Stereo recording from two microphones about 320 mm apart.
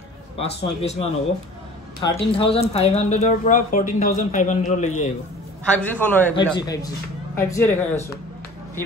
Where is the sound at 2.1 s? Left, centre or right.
Centre.